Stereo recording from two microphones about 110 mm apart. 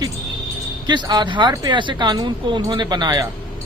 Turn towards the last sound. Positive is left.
turn(degrees=-40)  # may be behind; listen again after turning